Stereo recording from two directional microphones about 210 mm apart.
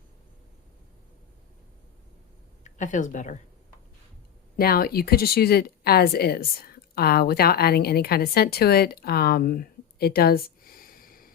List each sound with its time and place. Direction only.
2.6 s speech: 35° left (ahead or behind)
4.5 s a woman's voice: 45° left (ahead or behind)